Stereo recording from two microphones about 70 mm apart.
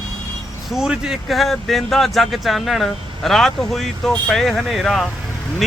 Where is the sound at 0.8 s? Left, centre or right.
Centre.